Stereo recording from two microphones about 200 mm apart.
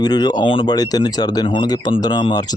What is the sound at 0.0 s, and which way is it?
Speech, 20° left (ahead or behind).